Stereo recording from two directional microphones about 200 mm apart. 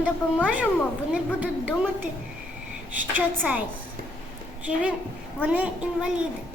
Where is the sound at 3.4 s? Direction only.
5° right (ahead or behind).